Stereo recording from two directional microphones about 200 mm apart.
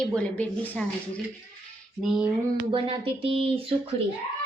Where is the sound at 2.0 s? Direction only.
5° right (ahead or behind).